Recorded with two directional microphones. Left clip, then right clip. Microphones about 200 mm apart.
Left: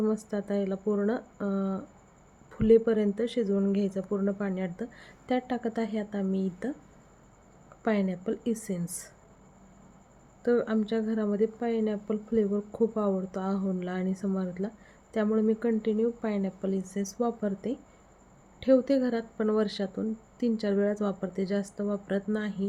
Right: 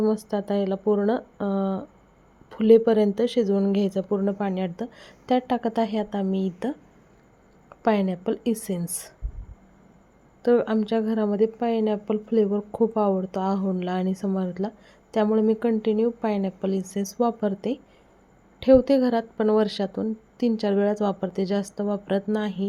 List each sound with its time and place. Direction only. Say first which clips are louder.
0.3 s a woman's voice: right 6 dB; 15° right (ahead or behind)
7.9 s a woman's voice: right 6 dB; 15° right (ahead or behind)
10.4 s a woman's voice: right 6 dB; 15° right (ahead or behind)